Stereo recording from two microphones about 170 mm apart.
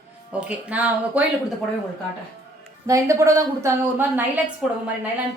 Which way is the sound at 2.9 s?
20° right (ahead or behind).